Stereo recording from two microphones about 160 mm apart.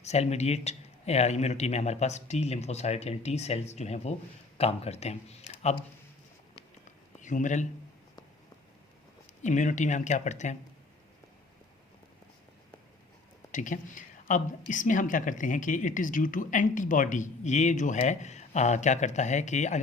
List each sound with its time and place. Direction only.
0.0 s speech: 45° left (ahead or behind)
7.2 s speech: 50° left (ahead or behind)
9.4 s speech: 50° left (ahead or behind)
13.5 s speech: 50° left (ahead or behind)